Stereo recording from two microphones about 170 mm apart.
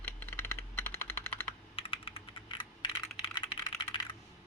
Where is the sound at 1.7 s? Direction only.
30° left (ahead or behind).